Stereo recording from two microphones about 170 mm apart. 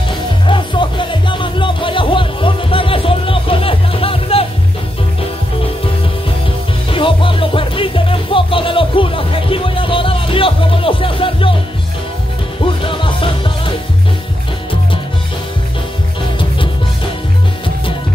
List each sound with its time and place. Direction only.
0.5 s music: 30° left (ahead or behind)
6.9 s music: 30° left (ahead or behind)
12.8 s music: 30° left (ahead or behind)